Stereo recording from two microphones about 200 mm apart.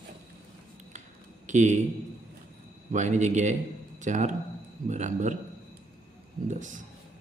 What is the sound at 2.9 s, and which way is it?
Speech, 35° right (ahead or behind).